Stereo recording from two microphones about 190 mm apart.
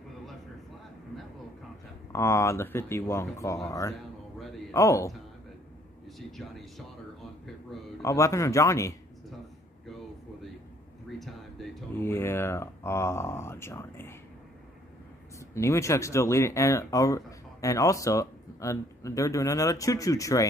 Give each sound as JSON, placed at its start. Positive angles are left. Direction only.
{"t": 2.1, "sound": "speech", "side_deg": 15}
{"t": 6.1, "sound": "speech", "side_deg": 0}
{"t": 8.0, "sound": "speech", "side_deg": 15}
{"t": 11.1, "sound": "a sound", "side_deg": 0}
{"t": 12.0, "sound": "speech", "side_deg": 15}
{"t": 15.5, "sound": "speech", "side_deg": 15}